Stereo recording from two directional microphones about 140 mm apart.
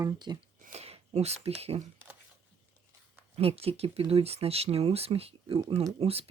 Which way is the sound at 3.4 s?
45° right (ahead or behind).